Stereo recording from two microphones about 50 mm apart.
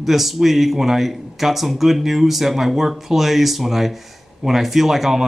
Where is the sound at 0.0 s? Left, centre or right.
Centre.